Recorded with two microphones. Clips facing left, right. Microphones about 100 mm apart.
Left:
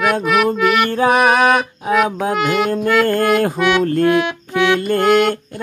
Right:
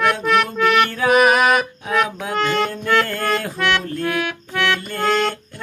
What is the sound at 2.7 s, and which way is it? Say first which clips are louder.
Music: left 5 dB; 45° left (ahead or behind).